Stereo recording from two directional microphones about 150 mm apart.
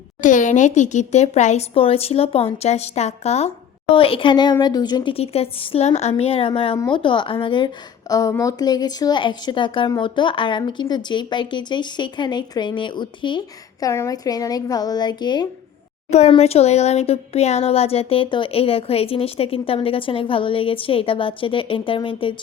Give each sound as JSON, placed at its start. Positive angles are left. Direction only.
{"t": 0.2, "sound": "a woman's voice", "side_deg": 60}
{"t": 5.1, "sound": "a woman's voice", "side_deg": 40}
{"t": 16.0, "sound": "speech", "side_deg": 50}